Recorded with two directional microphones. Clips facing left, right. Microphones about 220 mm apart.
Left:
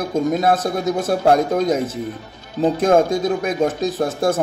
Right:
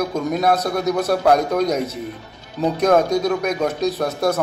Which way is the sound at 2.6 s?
30° left (ahead or behind).